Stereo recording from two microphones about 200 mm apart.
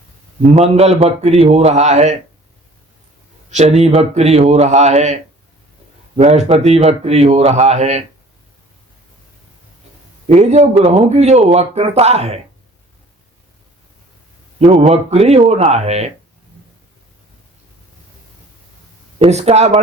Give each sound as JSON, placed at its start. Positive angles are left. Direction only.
{"t": 0.5, "sound": "speech", "side_deg": -30}
{"t": 3.5, "sound": "speech", "side_deg": -35}
{"t": 6.1, "sound": "speech", "side_deg": -35}
{"t": 10.2, "sound": "speech", "side_deg": -35}
{"t": 14.6, "sound": "speech", "side_deg": -30}
{"t": 19.2, "sound": "speech", "side_deg": -30}